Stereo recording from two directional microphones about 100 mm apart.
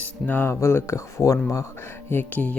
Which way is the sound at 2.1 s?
20° left (ahead or behind).